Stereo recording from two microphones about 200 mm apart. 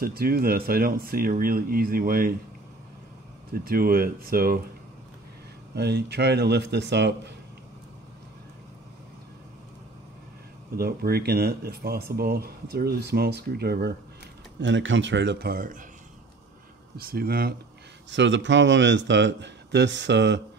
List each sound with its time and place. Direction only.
0.0 s speech: 50° right (ahead or behind)
3.5 s speech: 45° right (ahead or behind)
5.8 s a man's voice: 55° right (ahead or behind)
10.8 s speech: 50° right (ahead or behind)
14.6 s a man's voice: 65° right (ahead or behind); by 15.8 s 45° right (ahead or behind)
16.9 s speech: 50° right (ahead or behind)
18.1 s a man's voice: 65° right (ahead or behind)